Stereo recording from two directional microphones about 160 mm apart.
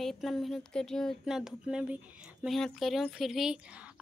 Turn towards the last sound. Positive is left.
turn(degrees=-5)  # may be behind; listen again after turning